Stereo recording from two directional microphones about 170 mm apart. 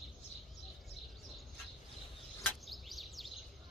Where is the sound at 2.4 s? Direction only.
Centre (ahead or behind).